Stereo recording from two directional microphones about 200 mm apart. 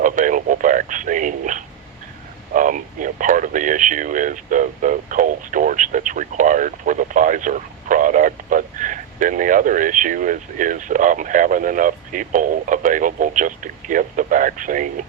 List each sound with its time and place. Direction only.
0.0 s radio: 40° right (ahead or behind)
2.5 s speech: 40° right (ahead or behind)